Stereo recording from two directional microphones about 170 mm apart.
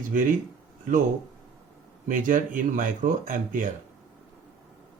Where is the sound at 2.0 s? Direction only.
50° right (ahead or behind).